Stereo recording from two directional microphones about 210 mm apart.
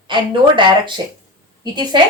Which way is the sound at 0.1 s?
20° right (ahead or behind).